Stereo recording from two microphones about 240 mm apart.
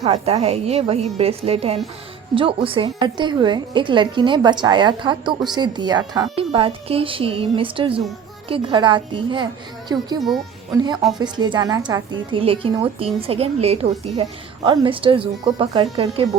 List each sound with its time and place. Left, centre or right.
0.0 s a woman's voice: right
11.2 s a woman's voice: centre